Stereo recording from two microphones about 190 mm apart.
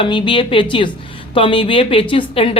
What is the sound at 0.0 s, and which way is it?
Speech, 25° left (ahead or behind).